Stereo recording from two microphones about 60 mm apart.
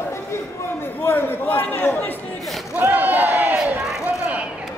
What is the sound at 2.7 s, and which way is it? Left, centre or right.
Battle cry, right.